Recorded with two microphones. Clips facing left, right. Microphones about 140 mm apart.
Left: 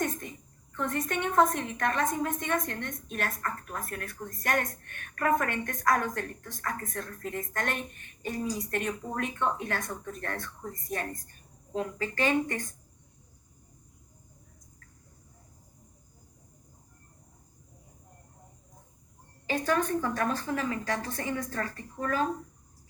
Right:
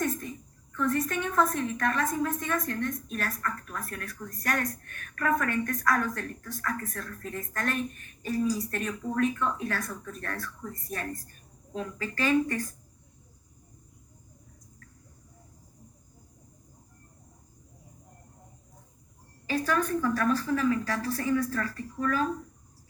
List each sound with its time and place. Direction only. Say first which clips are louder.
0.0 s a sound: right 1 dB; 20° left (ahead or behind)
0.7 s a woman's voice: right 3 dB; 25° left (ahead or behind)
19.5 s a woman's voice: even; 25° left (ahead or behind)